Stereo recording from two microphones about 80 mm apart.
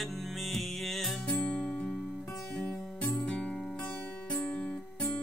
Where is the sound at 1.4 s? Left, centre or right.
Centre.